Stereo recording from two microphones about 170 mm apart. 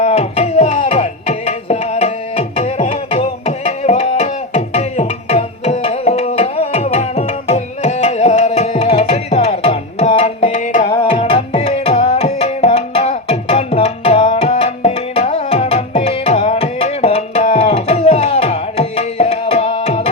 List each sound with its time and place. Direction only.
0.0 s music: 35° left (ahead or behind)
10.8 s tabla: 35° left (ahead or behind)